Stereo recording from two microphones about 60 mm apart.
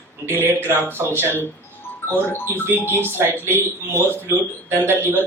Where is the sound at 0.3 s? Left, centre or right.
Right.